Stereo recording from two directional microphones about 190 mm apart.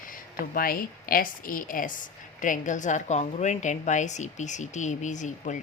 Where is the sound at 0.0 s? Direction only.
45° left (ahead or behind).